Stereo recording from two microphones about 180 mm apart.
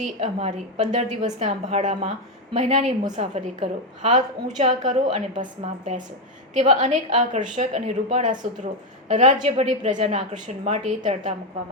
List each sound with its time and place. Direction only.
0.2 s a woman's voice: 35° right (ahead or behind)